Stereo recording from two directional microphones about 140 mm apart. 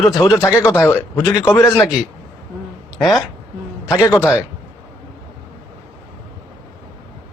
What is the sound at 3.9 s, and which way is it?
Speech, 20° left (ahead or behind).